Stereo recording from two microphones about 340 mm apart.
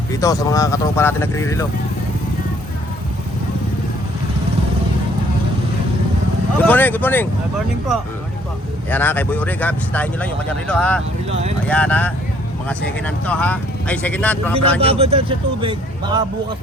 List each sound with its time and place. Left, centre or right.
0.1 s speech: centre
6.7 s speech: centre
8.9 s speech: centre
11.3 s speech: centre
11.7 s speech: centre
14.8 s speech: centre